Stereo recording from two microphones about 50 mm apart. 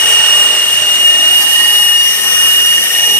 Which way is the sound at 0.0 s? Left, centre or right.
Left.